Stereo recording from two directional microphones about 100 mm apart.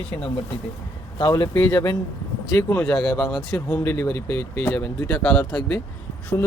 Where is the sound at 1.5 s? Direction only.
30° left (ahead or behind).